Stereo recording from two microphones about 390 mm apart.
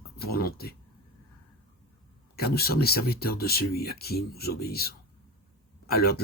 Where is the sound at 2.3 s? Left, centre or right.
Left.